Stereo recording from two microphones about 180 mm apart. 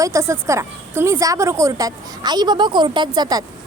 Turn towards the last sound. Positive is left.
turn(degrees=-20)  # may be behind; listen again after turning